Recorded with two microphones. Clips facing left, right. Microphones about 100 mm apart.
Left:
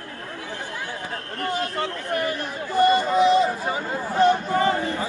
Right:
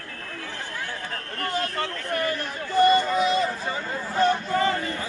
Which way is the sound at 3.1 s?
20° left (ahead or behind).